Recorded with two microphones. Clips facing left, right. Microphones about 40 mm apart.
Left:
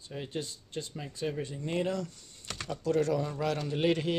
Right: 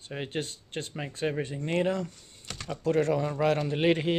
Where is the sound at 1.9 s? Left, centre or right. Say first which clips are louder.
Right 4 dB; right.